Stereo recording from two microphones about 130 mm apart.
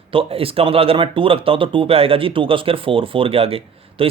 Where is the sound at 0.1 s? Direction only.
45° right (ahead or behind).